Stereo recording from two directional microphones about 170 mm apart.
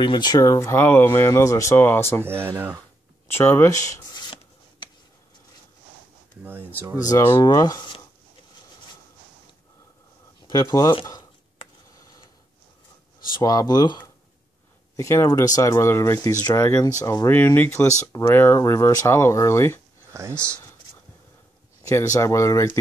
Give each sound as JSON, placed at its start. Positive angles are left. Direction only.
{"t": 0.0, "sound": "speech", "side_deg": 25}
{"t": 2.2, "sound": "speech", "side_deg": -15}
{"t": 3.3, "sound": "writing", "side_deg": 15}
{"t": 6.4, "sound": "a sound", "side_deg": -10}
{"t": 7.0, "sound": "speech", "side_deg": 20}
{"t": 10.5, "sound": "speech", "side_deg": 20}
{"t": 13.3, "sound": "speech", "side_deg": 20}
{"t": 20.1, "sound": "a sound", "side_deg": -15}
{"t": 22.1, "sound": "speech", "side_deg": 15}